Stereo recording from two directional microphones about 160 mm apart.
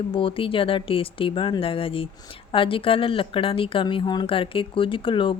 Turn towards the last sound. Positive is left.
turn(degrees=30)  # may be behind; listen again after turning